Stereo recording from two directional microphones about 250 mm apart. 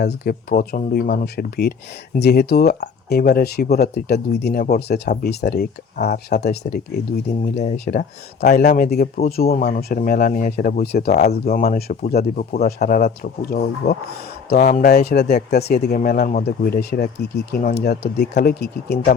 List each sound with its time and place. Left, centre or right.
0.0 s speech: left